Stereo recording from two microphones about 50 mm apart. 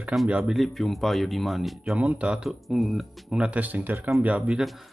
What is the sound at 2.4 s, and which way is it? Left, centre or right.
Speech, centre.